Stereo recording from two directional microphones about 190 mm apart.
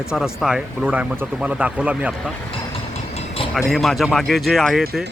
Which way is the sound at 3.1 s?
30° left (ahead or behind).